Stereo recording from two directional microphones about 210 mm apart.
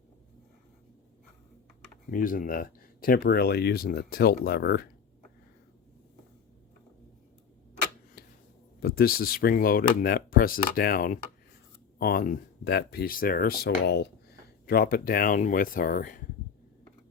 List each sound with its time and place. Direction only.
2.0 s speech: 40° left (ahead or behind)
8.8 s speech: 45° left (ahead or behind)